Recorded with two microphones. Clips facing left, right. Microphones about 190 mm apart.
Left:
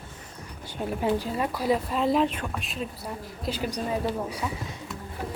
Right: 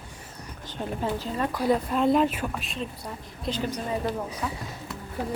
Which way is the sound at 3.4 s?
10° left (ahead or behind).